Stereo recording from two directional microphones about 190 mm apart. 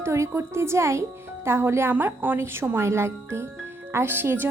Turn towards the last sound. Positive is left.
turn(degrees=-10)  # may be behind; listen again after turning